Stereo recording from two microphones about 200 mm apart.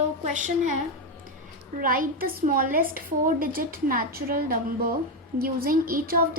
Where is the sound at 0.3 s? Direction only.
40° right (ahead or behind).